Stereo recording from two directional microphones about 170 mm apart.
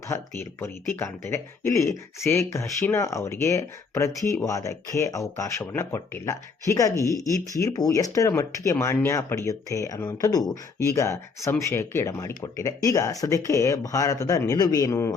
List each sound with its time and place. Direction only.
0.1 s speech: 15° left (ahead or behind)